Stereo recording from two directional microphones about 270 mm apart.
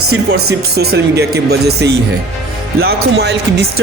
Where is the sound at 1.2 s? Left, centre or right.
Right.